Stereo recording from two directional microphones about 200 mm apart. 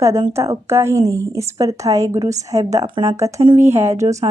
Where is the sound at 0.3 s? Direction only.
15° right (ahead or behind).